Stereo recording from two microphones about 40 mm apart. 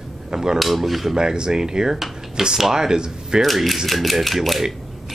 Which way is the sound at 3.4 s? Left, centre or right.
Centre.